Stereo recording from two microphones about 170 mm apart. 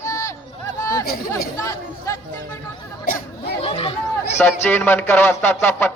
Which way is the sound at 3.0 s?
60° left (ahead or behind).